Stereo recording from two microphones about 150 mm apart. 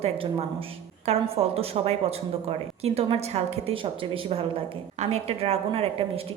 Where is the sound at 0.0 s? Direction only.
40° right (ahead or behind).